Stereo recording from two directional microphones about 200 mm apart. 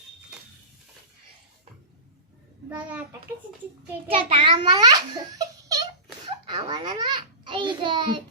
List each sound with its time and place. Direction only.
2.6 s a child's voice: 10° right (ahead or behind)
4.1 s a child's voice: 25° right (ahead or behind)